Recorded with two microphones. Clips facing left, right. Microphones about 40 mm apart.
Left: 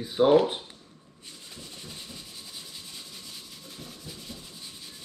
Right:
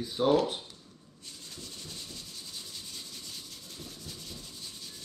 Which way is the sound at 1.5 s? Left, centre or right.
Left.